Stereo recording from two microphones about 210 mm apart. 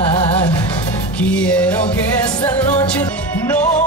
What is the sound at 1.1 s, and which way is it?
Music, 5° left (ahead or behind).